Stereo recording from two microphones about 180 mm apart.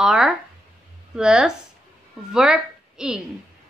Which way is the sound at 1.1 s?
5° right (ahead or behind).